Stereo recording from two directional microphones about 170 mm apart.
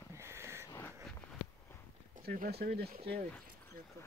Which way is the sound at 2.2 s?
65° right (ahead or behind).